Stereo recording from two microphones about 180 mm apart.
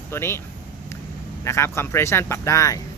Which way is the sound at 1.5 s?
15° left (ahead or behind).